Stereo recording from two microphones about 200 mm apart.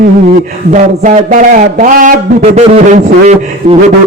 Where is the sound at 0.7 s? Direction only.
40° right (ahead or behind).